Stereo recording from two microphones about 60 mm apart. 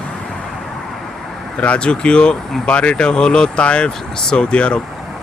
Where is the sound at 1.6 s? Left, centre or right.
Centre.